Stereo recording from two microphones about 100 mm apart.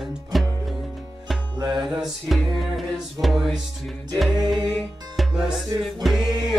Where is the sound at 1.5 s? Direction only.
45° right (ahead or behind).